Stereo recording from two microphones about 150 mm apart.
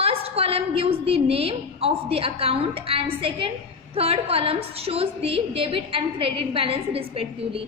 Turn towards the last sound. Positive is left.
turn(degrees=-40)  # may be behind; listen again after turning